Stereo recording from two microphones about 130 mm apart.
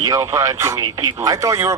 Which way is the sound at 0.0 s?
25° right (ahead or behind).